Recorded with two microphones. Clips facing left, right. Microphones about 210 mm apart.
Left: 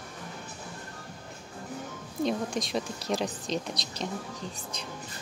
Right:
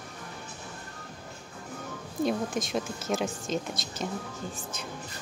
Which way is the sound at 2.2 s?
Centre (ahead or behind).